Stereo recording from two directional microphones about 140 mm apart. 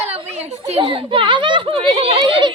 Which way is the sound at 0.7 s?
40° right (ahead or behind).